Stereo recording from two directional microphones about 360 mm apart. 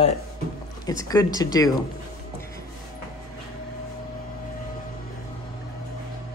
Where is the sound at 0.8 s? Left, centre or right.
Centre.